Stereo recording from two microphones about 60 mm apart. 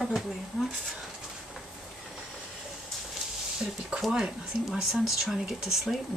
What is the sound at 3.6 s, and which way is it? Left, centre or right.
Speech, centre.